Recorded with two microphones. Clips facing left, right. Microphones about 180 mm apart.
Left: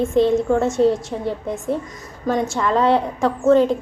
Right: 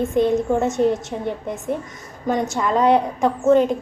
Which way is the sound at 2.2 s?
20° right (ahead or behind).